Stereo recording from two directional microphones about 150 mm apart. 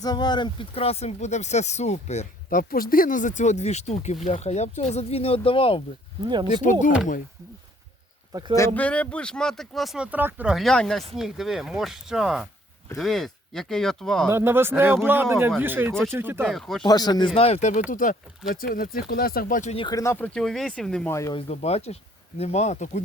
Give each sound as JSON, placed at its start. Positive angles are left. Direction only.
{"t": 0.0, "sound": "speech", "side_deg": 25}
{"t": 2.5, "sound": "speech", "side_deg": 75}
{"t": 6.2, "sound": "speech", "side_deg": -30}
{"t": 6.5, "sound": "speech", "side_deg": 55}
{"t": 8.3, "sound": "speech", "side_deg": -25}
{"t": 8.5, "sound": "speech", "side_deg": 15}
{"t": 14.3, "sound": "speech", "side_deg": -15}
{"t": 16.5, "sound": "speech", "side_deg": 0}
{"t": 16.8, "sound": "speech", "side_deg": 25}
{"t": 17.9, "sound": "speech", "side_deg": 65}
{"t": 19.9, "sound": "speech", "side_deg": 20}
{"t": 21.1, "sound": "speech", "side_deg": 20}
{"t": 21.3, "sound": "speech", "side_deg": 45}